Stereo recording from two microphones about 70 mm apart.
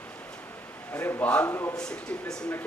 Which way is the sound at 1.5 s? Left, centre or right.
Left.